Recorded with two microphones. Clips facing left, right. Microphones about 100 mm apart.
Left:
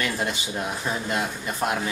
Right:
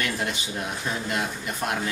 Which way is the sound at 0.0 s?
30° left (ahead or behind).